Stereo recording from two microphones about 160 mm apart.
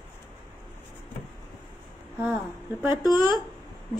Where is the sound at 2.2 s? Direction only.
10° right (ahead or behind).